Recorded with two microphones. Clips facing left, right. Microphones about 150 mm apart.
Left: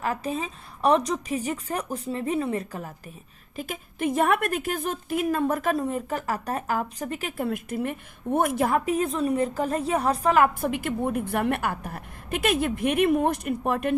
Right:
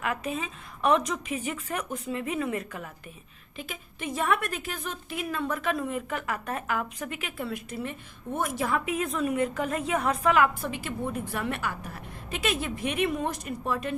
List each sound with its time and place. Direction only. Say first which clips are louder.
0.0 s a woman's voice: left 3 dB; 35° left (ahead or behind)
3.6 s a woman's voice: left 8 dB; 45° left (ahead or behind)
10.6 s a woman's voice: left 6 dB; 55° left (ahead or behind)